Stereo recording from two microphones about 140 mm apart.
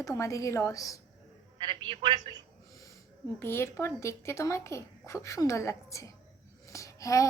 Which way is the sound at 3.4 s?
20° left (ahead or behind).